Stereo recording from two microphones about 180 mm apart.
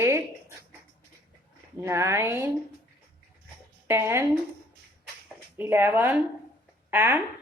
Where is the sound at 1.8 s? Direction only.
15° right (ahead or behind).